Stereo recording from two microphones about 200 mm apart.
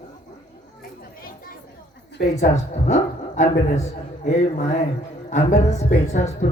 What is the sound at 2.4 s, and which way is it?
A woman's voice, 35° left (ahead or behind).